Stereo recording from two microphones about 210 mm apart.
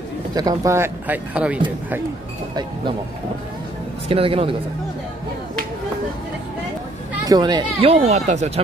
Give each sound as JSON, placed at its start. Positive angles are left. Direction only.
{"t": 0.3, "sound": "speech", "side_deg": -20}
{"t": 4.1, "sound": "speech", "side_deg": -25}
{"t": 7.2, "sound": "speech", "side_deg": -20}